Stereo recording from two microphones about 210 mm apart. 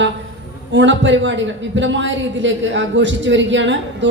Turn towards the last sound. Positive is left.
turn(degrees=-60)  # may be behind; listen again after turning